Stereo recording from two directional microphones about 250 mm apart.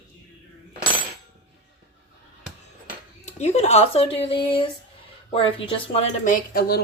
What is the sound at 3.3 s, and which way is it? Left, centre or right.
Speech, left.